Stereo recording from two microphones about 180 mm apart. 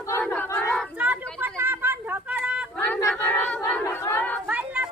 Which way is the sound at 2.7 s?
10° left (ahead or behind).